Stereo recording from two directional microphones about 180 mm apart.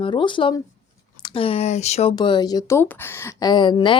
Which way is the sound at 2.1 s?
25° left (ahead or behind).